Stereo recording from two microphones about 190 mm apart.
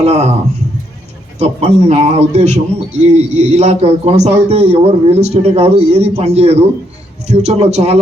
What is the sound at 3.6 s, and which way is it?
A man's voice, 35° right (ahead or behind).